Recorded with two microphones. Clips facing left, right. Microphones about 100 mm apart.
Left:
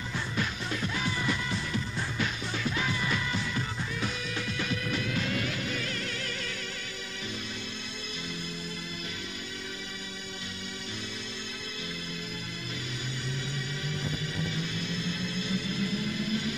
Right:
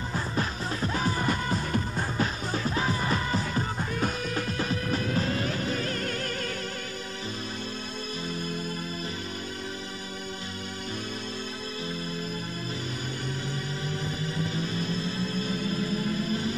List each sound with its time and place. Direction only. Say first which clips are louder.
0.1 s music: right 2 dB; 35° right (ahead or behind)
14.0 s music: right 3 dB; 40° right (ahead or behind)